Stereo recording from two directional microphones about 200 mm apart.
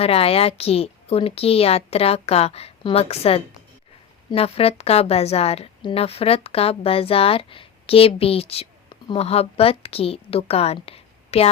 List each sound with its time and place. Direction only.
0.0 s a woman's voice: 30° left (ahead or behind)